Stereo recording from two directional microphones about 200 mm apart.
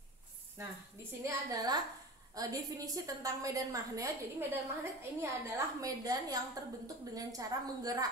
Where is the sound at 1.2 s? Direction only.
20° right (ahead or behind).